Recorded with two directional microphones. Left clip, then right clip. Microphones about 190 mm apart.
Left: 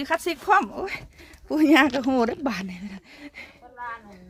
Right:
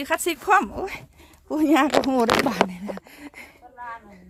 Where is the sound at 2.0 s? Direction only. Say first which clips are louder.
Right 4 dB; 5° right (ahead or behind).